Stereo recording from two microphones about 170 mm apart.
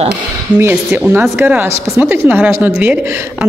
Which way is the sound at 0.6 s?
10° right (ahead or behind).